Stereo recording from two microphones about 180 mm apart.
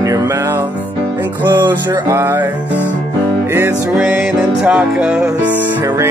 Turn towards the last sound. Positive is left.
turn(degrees=-15)  # may be behind; listen again after turning